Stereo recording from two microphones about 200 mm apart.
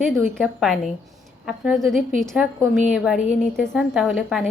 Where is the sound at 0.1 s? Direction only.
Centre (ahead or behind).